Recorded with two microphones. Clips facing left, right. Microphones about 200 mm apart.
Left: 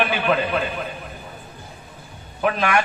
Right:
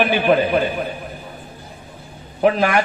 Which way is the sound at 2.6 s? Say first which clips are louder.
Right 3 dB; 35° right (ahead or behind).